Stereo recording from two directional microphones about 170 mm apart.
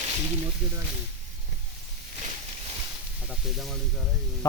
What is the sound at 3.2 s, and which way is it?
Speech, centre (ahead or behind).